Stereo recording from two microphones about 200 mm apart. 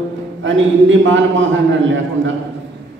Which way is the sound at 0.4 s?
70° right (ahead or behind).